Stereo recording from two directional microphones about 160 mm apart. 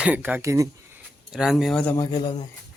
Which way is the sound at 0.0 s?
10° right (ahead or behind).